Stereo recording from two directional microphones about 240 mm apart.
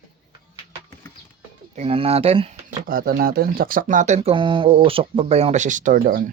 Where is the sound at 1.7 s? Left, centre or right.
Right.